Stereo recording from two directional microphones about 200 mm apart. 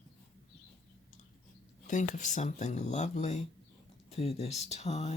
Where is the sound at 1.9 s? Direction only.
40° left (ahead or behind).